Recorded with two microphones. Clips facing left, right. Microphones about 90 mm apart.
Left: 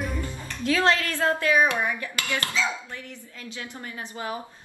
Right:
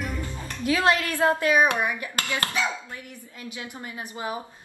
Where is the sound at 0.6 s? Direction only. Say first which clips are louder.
Even; 15° right (ahead or behind).